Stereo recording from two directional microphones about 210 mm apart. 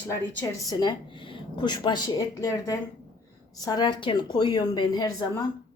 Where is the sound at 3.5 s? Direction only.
20° left (ahead or behind).